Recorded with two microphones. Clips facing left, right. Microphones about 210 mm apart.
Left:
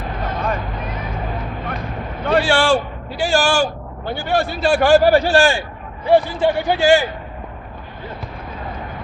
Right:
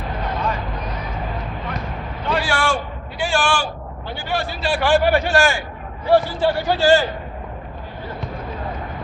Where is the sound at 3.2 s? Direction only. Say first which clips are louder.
Left 4 dB; 40° left (ahead or behind).